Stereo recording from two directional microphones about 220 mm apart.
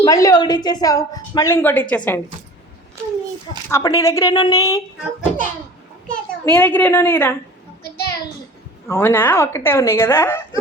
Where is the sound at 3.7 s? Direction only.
15° left (ahead or behind).